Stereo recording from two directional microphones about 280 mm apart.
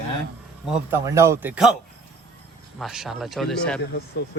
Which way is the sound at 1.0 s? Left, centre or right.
Centre.